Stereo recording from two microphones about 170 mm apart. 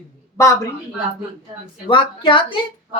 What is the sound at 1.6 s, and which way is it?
Speech, 30° left (ahead or behind).